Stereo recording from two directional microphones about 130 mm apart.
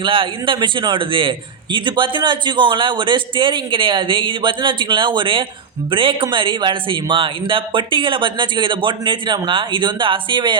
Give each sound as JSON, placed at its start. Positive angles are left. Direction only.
{"t": 0.0, "sound": "a man's voice", "side_deg": -40}